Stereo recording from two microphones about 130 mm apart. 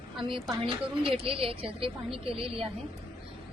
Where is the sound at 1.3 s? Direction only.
45° right (ahead or behind).